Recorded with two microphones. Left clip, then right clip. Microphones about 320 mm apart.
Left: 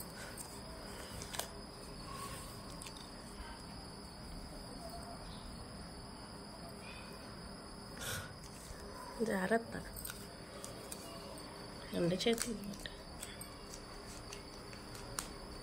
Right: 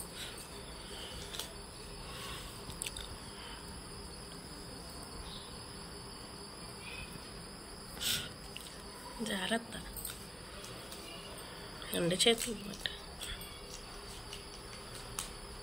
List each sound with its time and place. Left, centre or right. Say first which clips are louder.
8.0 s cricket: right 8 dB; left
9.2 s speech: left 1 dB; centre
11.9 s speech: right 5 dB; centre